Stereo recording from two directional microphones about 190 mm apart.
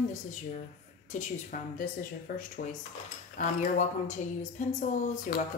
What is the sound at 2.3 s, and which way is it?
Speech, 55° left (ahead or behind).